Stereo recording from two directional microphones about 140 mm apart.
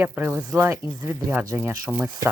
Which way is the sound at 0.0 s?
15° right (ahead or behind).